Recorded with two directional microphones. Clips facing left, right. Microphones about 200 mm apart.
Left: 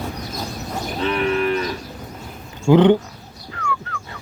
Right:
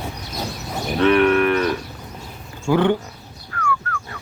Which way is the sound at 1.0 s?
65° right (ahead or behind).